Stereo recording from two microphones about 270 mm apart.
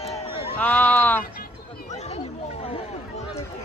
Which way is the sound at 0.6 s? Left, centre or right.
Centre.